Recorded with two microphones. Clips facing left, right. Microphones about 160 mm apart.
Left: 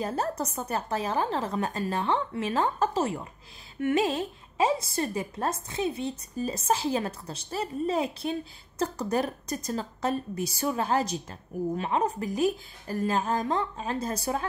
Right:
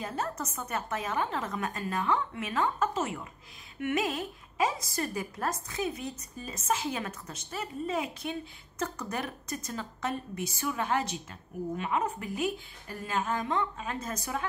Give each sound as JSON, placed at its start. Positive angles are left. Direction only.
{"t": 0.0, "sound": "a woman's voice", "side_deg": 35}